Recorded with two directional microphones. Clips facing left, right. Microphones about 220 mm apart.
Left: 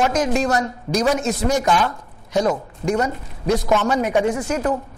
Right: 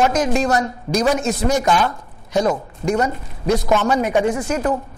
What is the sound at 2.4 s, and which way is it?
A man's voice, 25° right (ahead or behind).